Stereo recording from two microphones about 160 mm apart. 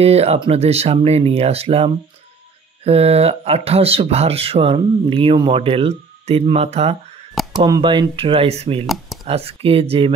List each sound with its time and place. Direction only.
0.0 s speech: 40° right (ahead or behind)
7.6 s speech: 25° right (ahead or behind)
8.8 s speech: centre (ahead or behind)
9.3 s speech: 40° right (ahead or behind)